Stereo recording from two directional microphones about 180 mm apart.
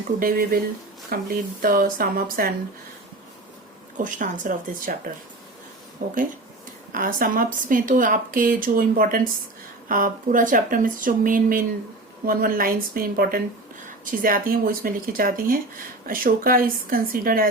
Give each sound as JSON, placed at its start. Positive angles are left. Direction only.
{"t": 0.2, "sound": "speech", "side_deg": -55}
{"t": 3.9, "sound": "speech", "side_deg": -45}